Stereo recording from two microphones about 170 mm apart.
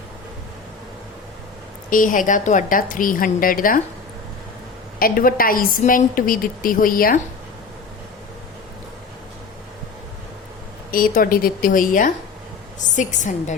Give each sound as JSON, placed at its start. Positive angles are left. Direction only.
{"t": 1.9, "sound": "a woman's voice", "side_deg": 50}
{"t": 4.9, "sound": "a woman's voice", "side_deg": 60}
{"t": 10.9, "sound": "a woman's voice", "side_deg": 55}